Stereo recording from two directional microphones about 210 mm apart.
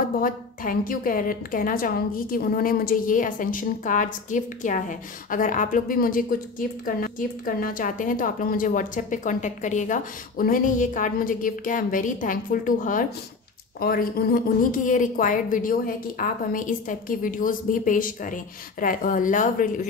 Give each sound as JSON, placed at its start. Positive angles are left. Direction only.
{"t": 0.2, "sound": "a woman's voice", "side_deg": 40}